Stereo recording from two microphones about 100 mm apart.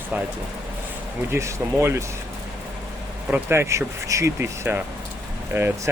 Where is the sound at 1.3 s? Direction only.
30° right (ahead or behind).